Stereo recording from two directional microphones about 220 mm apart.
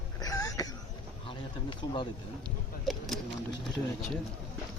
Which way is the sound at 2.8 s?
Centre (ahead or behind).